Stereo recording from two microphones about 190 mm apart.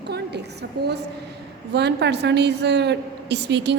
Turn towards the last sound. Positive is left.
turn(degrees=-65)  # may be behind; listen again after turning